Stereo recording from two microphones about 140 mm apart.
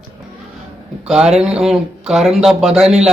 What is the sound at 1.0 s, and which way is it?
Speech, 5° right (ahead or behind).